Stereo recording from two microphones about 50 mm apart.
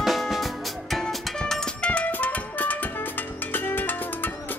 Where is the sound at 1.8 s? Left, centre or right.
Left.